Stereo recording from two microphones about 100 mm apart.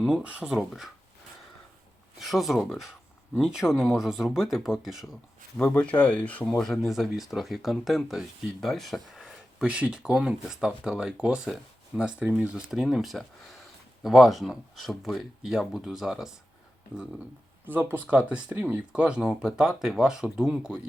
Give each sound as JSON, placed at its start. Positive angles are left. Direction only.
{"t": 0.0, "sound": "speech", "side_deg": -10}
{"t": 2.1, "sound": "speech", "side_deg": 0}
{"t": 5.5, "sound": "speech", "side_deg": 10}
{"t": 6.6, "sound": "speech", "side_deg": 0}
{"t": 17.7, "sound": "speech", "side_deg": -20}